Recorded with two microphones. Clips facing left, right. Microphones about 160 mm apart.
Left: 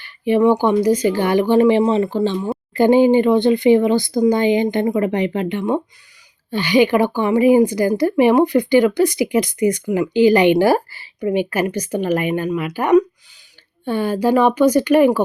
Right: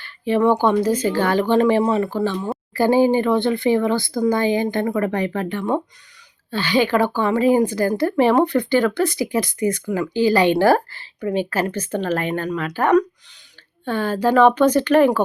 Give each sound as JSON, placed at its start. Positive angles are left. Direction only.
{"t": 0.0, "sound": "speech", "side_deg": 15}